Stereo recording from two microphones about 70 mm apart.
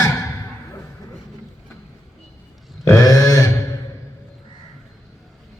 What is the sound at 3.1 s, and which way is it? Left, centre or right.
Mantra, left.